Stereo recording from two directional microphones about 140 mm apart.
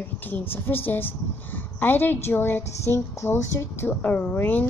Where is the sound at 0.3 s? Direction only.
15° left (ahead or behind).